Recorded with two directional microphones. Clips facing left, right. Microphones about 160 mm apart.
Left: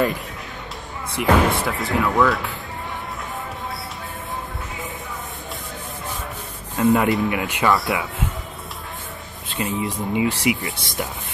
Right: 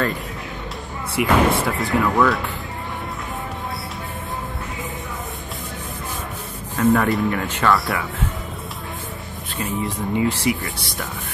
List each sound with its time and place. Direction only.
1.1 s speech: centre (ahead or behind)
6.8 s speech: 15° left (ahead or behind)
9.6 s speech: 20° left (ahead or behind)